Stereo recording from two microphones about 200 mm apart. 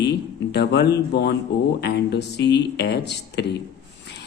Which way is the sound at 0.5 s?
55° left (ahead or behind).